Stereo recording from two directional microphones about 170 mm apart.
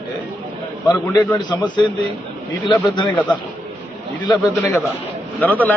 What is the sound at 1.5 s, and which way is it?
A man's voice, 25° left (ahead or behind).